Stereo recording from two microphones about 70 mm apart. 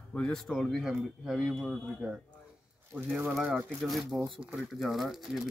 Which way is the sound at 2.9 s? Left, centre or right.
Right.